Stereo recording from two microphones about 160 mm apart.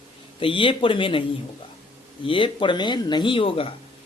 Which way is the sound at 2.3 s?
30° left (ahead or behind).